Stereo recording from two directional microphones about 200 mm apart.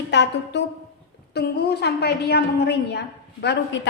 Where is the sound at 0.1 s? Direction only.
60° left (ahead or behind).